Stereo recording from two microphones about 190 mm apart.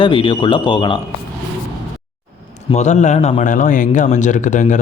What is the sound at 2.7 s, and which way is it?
A man's voice, 40° left (ahead or behind).